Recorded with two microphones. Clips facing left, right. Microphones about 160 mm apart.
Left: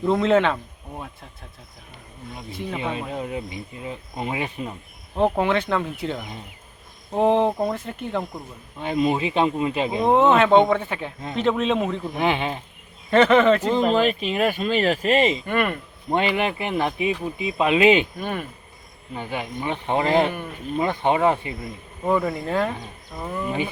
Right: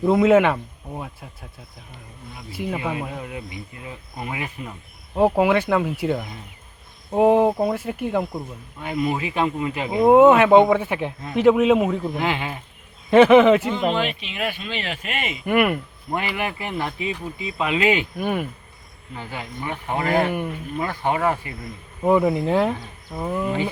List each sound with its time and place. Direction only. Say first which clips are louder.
0.0 s speech: right 3 dB; 10° right (ahead or behind)
2.5 s speech: right 4 dB; 10° right (ahead or behind)
2.7 s speech: left 2 dB; 25° left (ahead or behind)
5.1 s speech: right 3 dB; 10° right (ahead or behind)
8.8 s speech: left 3 dB; 25° left (ahead or behind)
9.9 s speech: right 6 dB; 10° right (ahead or behind)
12.1 s speech: left 2 dB; 20° left (ahead or behind)
13.1 s speech: right 4 dB; 10° right (ahead or behind)
13.9 s speech: left 5 dB; 40° left (ahead or behind)
15.4 s speech: right 4 dB; 10° right (ahead or behind)
16.1 s speech: left 4 dB; 20° left (ahead or behind)
18.2 s speech: right 4 dB; 10° right (ahead or behind)
19.1 s speech: left 4 dB; 20° left (ahead or behind)
22.0 s speech: right 4 dB; 15° right (ahead or behind)